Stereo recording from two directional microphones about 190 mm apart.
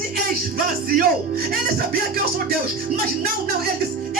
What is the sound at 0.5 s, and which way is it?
Speech, 45° right (ahead or behind).